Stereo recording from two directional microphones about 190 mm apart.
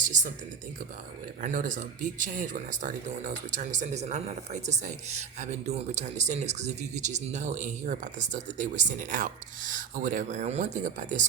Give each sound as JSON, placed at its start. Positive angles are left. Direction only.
{"t": 0.0, "sound": "speech", "side_deg": -40}
{"t": 1.4, "sound": "speech", "side_deg": -45}